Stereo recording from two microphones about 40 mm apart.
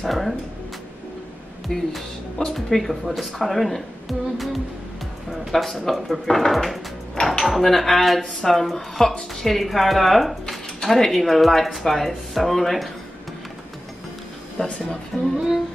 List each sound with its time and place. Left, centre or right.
0.0 s a woman's voice: centre
1.7 s a woman's voice: centre
14.6 s speech: left
15.1 s a woman's voice: centre